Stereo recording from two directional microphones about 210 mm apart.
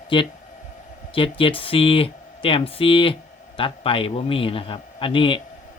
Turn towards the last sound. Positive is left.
turn(degrees=25)  # may be behind; listen again after turning